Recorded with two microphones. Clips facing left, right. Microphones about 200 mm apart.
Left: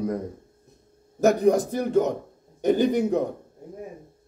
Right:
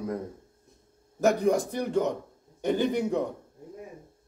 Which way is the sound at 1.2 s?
40° left (ahead or behind).